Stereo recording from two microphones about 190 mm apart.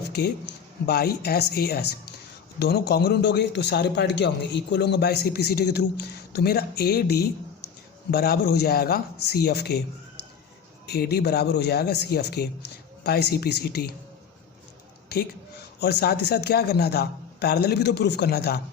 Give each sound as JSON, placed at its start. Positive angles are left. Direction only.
{"t": 0.1, "sound": "a man's voice", "side_deg": 60}
{"t": 10.8, "sound": "a man's voice", "side_deg": 60}
{"t": 15.1, "sound": "a man's voice", "side_deg": 55}